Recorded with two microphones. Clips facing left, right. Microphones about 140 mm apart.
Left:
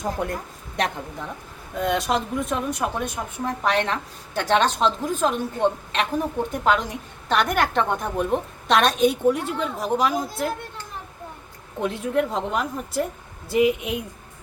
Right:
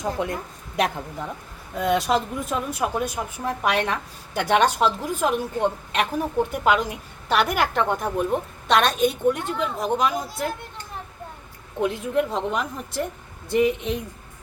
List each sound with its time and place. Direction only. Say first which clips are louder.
0.0 s a woman's voice: right 1 dB; centre (ahead or behind)
1.8 s a woman's voice: right 2 dB; centre (ahead or behind)
11.8 s a woman's voice: even; centre (ahead or behind)